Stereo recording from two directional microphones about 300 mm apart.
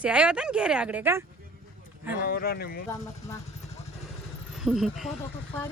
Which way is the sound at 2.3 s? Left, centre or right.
Left.